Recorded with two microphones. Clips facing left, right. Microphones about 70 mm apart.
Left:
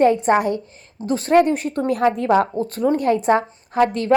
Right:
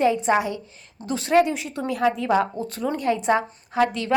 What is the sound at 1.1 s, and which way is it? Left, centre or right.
Speech, left.